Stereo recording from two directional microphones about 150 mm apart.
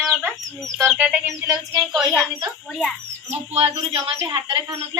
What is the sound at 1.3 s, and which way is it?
Speech, 20° right (ahead or behind).